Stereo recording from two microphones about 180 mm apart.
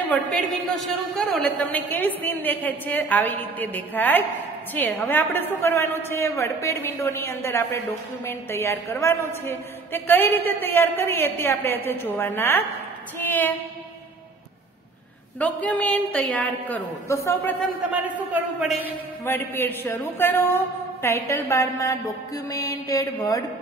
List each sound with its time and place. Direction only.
0.1 s a woman's voice: 5° left (ahead or behind)
15.3 s a woman's voice: 10° left (ahead or behind)
18.0 s a man's voice: 10° right (ahead or behind)
19.2 s a woman's voice: 10° left (ahead or behind)